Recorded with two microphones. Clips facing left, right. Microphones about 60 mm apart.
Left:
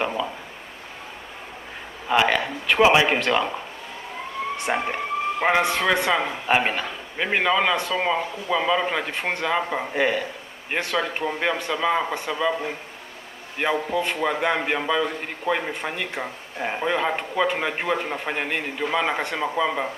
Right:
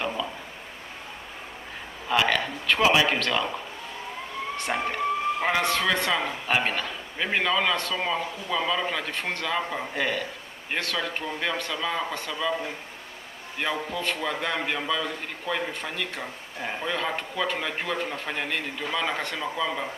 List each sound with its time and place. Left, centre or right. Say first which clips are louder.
0.0 s a sound: left 4 dB; left
2.0 s a man's voice: left 4 dB; centre
4.5 s a man's voice: left 2 dB; centre
13.7 s a man's voice: left 5 dB; centre